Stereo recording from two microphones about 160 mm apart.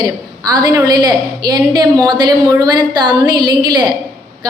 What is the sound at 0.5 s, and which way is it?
A woman's voice, 25° right (ahead or behind).